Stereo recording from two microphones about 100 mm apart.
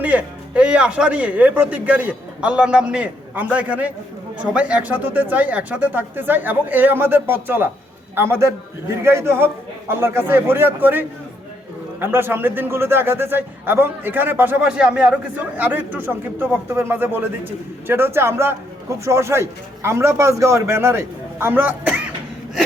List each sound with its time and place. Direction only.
0.0 s a man's voice: 15° right (ahead or behind)